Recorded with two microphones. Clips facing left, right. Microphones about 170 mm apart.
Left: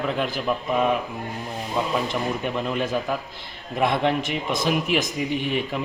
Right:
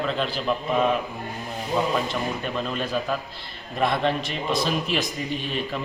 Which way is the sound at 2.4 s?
15° left (ahead or behind).